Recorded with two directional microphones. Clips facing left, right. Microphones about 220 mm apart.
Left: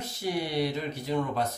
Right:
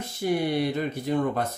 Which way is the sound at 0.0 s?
50° right (ahead or behind).